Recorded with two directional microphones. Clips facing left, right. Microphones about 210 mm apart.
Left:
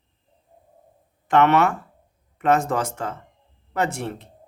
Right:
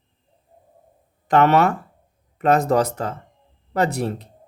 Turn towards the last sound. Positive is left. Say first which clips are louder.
# right 4 dB
turn(degrees=-35)  # may be behind; listen again after turning